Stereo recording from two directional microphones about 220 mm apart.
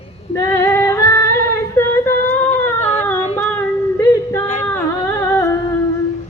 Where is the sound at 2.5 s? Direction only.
30° left (ahead or behind).